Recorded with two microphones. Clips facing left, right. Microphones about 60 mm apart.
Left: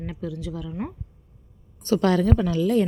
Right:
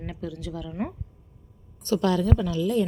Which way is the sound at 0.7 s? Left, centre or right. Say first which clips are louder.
Right 3 dB; centre.